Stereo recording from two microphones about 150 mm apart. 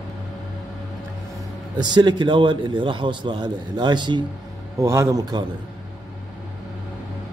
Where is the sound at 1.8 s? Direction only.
30° right (ahead or behind).